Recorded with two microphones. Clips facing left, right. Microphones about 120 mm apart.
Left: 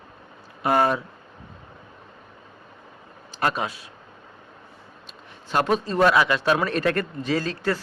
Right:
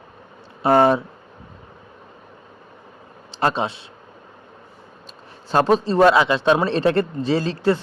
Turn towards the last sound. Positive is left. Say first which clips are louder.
# right 5 dB
turn(degrees=-25)  # may be behind; listen again after turning